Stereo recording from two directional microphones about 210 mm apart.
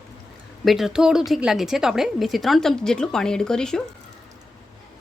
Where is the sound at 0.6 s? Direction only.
Centre (ahead or behind).